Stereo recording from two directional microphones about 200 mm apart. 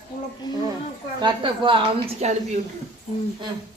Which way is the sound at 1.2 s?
25° right (ahead or behind).